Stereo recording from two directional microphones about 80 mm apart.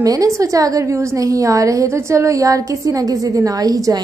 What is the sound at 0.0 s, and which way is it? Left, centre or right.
A woman's voice, right.